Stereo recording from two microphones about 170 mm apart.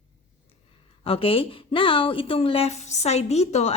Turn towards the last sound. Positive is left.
turn(degrees=40)  # may be behind; listen again after turning